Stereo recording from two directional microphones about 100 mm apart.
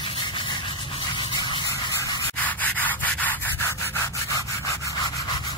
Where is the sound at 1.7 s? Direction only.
30° left (ahead or behind).